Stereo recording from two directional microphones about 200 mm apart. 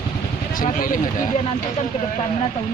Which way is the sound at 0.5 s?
45° left (ahead or behind).